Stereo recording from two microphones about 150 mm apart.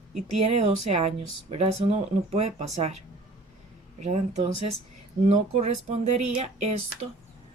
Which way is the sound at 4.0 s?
50° right (ahead or behind).